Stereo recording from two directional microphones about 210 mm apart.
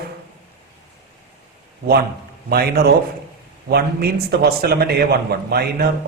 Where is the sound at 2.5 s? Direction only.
50° right (ahead or behind).